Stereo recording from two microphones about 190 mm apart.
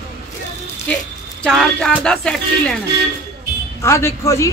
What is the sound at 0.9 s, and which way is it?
Speech, 5° left (ahead or behind).